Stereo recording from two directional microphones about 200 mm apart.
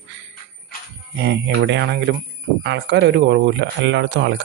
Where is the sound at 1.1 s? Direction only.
60° right (ahead or behind).